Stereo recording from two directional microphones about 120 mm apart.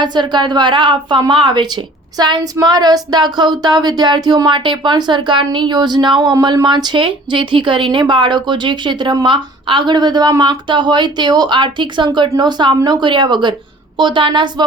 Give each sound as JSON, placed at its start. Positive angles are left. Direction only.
{"t": 0.0, "sound": "a woman's voice", "side_deg": -40}